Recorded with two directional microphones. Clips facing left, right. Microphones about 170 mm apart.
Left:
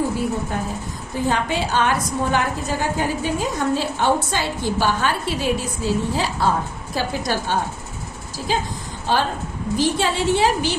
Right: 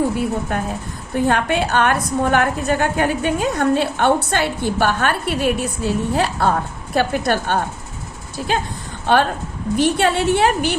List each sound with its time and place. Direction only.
0.5 s a woman's voice: 60° right (ahead or behind)